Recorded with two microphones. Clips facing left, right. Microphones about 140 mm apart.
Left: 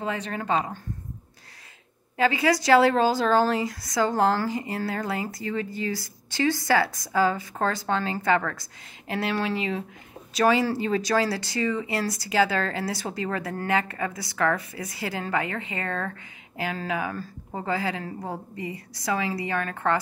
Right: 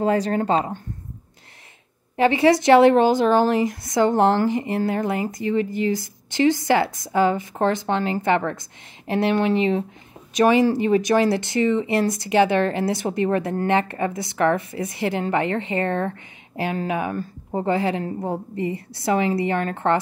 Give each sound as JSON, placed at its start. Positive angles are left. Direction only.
{"t": 0.0, "sound": "speech", "side_deg": -40}
{"t": 2.1, "sound": "speech", "side_deg": -25}